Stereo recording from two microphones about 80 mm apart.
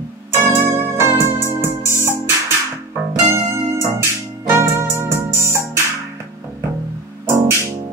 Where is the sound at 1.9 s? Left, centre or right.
Left.